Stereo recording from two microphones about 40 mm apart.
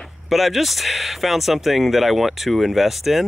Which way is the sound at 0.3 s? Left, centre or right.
Centre.